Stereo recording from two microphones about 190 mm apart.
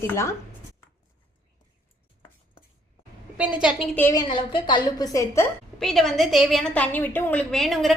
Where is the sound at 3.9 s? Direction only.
10° left (ahead or behind).